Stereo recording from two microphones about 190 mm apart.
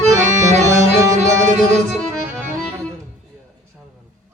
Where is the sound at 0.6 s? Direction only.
15° right (ahead or behind).